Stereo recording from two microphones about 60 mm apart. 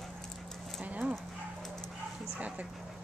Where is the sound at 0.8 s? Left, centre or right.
Right.